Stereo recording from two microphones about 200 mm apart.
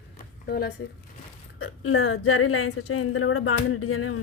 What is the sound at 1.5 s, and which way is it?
Speech, 90° left.